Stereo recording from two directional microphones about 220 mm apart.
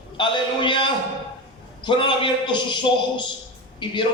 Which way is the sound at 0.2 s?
20° left (ahead or behind).